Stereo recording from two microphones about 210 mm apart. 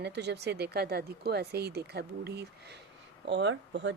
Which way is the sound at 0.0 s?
55° right (ahead or behind).